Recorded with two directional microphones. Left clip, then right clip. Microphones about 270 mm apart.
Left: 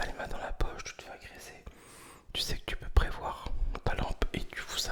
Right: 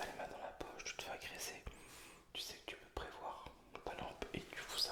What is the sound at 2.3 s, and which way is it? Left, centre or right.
Whispering, left.